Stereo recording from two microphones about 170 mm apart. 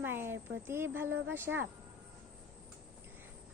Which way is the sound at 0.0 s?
15° right (ahead or behind).